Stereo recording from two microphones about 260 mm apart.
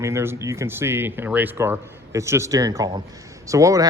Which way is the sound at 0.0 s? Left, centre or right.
Centre.